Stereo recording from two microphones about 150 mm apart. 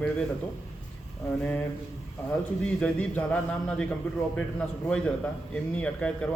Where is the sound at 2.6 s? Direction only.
10° left (ahead or behind).